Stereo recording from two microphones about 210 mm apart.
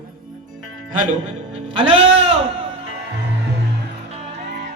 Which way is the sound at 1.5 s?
25° right (ahead or behind).